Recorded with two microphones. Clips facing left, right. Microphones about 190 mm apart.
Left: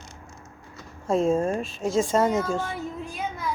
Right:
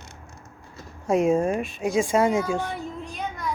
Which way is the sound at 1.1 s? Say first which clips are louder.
Right 2 dB; 15° right (ahead or behind).